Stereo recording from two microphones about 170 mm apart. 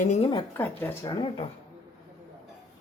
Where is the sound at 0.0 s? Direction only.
45° left (ahead or behind).